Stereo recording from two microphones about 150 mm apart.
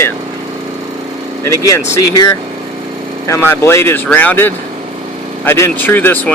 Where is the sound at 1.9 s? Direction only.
20° left (ahead or behind).